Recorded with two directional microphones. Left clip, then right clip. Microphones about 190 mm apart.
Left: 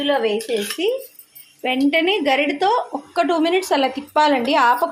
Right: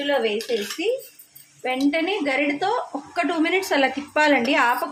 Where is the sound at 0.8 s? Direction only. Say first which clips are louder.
Left 3 dB; 45° left (ahead or behind).